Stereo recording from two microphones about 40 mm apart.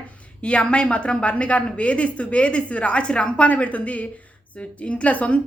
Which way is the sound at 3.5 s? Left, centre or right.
Left.